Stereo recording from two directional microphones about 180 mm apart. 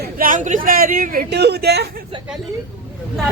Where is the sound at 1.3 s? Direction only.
65° right (ahead or behind).